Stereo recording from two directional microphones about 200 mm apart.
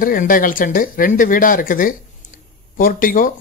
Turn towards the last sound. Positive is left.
turn(degrees=45)  # may be behind; listen again after turning